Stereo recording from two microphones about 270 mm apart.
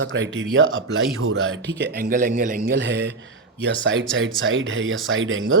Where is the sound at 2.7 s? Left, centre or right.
Right.